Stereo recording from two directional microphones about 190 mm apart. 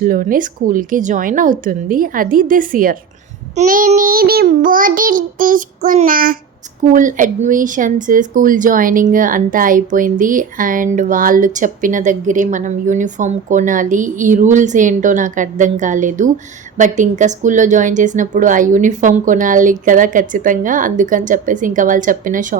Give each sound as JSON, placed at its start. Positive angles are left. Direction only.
{"t": 0.0, "sound": "speech", "side_deg": -45}